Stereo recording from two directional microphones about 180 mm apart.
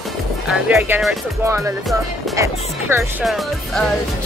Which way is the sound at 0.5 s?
10° right (ahead or behind).